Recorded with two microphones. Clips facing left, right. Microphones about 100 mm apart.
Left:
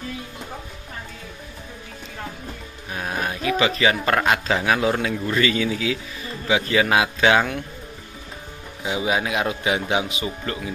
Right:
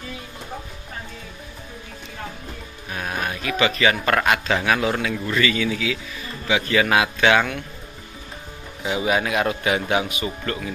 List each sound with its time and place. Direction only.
2.9 s speech: 20° left (ahead or behind)
8.8 s a man's voice: 15° left (ahead or behind)